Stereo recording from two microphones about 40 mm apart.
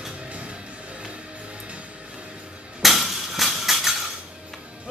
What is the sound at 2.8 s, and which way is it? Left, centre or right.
Music, centre.